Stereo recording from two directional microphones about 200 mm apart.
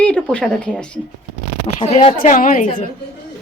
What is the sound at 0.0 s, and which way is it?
Speech, 5° left (ahead or behind).